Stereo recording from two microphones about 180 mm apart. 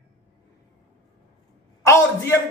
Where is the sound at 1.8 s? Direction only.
15° left (ahead or behind).